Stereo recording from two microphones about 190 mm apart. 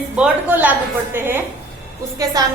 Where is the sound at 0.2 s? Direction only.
10° right (ahead or behind).